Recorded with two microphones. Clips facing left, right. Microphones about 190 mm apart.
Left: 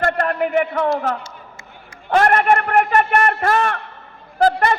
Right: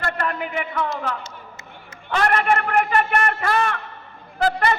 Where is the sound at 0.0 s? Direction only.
50° left (ahead or behind).